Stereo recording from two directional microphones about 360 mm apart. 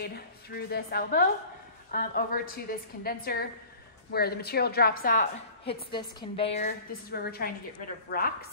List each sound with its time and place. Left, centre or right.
0.0 s a woman's voice: left
5.7 s a woman's voice: centre